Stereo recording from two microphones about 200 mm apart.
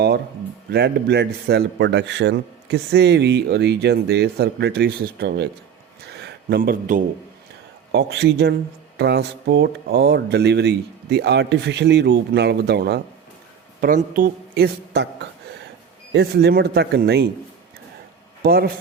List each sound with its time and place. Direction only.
0.7 s a man's voice: 55° right (ahead or behind)
6.1 s a sound: 55° right (ahead or behind)
7.9 s a man's voice: 60° right (ahead or behind)
18.4 s speech: 50° right (ahead or behind)